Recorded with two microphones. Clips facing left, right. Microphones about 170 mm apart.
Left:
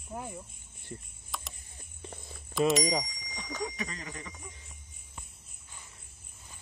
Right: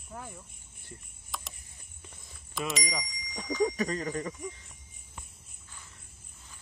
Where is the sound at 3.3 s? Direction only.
45° right (ahead or behind).